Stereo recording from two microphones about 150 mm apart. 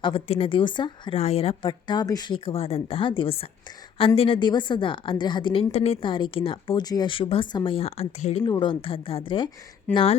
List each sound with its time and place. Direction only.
0.0 s a woman's voice: 40° left (ahead or behind)
1.2 s a woman's voice: 40° left (ahead or behind)
8.4 s a woman's voice: 30° left (ahead or behind)